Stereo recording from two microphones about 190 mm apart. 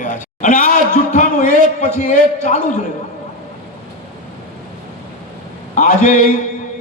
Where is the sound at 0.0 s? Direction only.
40° left (ahead or behind).